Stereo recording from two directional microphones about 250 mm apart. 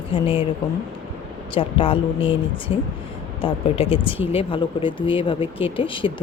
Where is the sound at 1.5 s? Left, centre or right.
Left.